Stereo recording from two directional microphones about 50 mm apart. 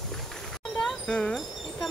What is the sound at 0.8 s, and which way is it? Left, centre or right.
Dog, centre.